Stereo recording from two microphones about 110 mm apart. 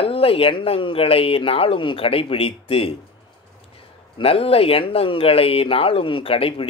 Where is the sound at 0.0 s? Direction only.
60° left (ahead or behind).